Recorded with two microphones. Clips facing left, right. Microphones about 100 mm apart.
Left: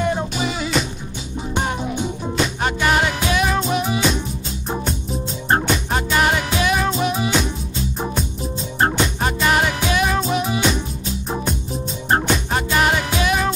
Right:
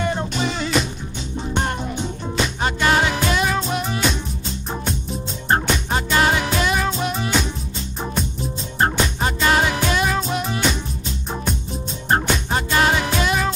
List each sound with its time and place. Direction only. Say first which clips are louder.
0.0 s music: left 1 dB; 5° left (ahead or behind)